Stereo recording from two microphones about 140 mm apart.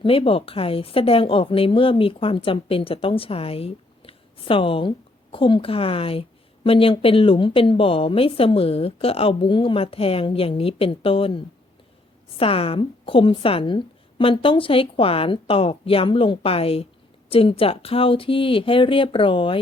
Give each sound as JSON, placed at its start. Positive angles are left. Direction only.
{"t": 0.0, "sound": "a woman's voice", "side_deg": 40}